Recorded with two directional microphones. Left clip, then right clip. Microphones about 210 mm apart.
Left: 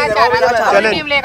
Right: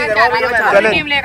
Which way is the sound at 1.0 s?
25° left (ahead or behind).